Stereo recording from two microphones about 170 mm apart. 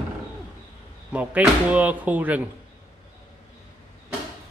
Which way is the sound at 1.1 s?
10° right (ahead or behind).